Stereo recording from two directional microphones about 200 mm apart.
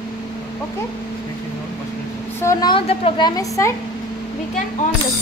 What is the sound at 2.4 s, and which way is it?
A woman's voice, 15° left (ahead or behind).